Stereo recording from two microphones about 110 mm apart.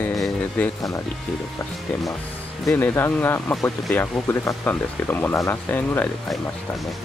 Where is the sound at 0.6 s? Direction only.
15° left (ahead or behind).